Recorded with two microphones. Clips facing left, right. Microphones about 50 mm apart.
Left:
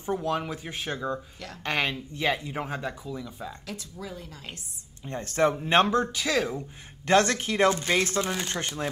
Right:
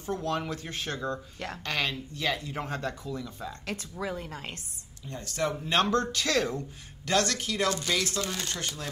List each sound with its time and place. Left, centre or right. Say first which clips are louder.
0.0 s speech: left 3 dB; centre
1.6 s speech: left 4 dB; left; by 3.5 s centre
3.6 s a woman's voice: right 4 dB; right
5.0 s speech: left 7 dB; left
5.9 s speech: left 1 dB; centre
7.1 s speech: left 5 dB; left
8.3 s speech: left 4 dB; left